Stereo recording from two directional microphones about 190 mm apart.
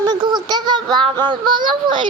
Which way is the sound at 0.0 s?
20° right (ahead or behind).